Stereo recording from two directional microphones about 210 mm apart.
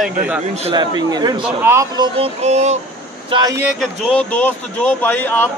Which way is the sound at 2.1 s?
30° right (ahead or behind).